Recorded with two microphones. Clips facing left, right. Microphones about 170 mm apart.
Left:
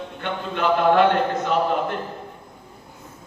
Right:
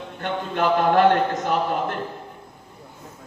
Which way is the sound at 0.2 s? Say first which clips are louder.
Right 1 dB; 45° right (ahead or behind).